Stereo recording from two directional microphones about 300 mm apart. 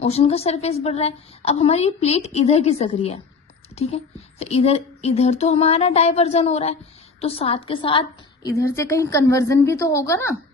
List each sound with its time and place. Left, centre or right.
0.0 s a woman's voice: centre